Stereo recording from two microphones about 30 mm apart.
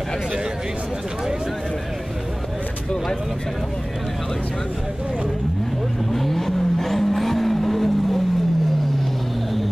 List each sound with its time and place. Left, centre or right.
6.1 s vehicle: centre